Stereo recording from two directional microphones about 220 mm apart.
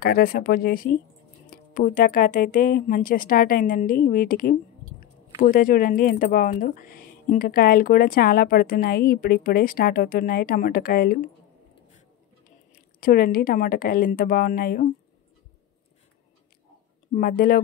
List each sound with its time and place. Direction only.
0.0 s speech: 45° left (ahead or behind)
13.0 s speech: 40° left (ahead or behind)
17.1 s speech: 40° left (ahead or behind)